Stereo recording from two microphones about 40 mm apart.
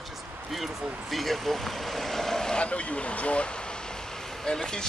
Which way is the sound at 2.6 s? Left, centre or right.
Left.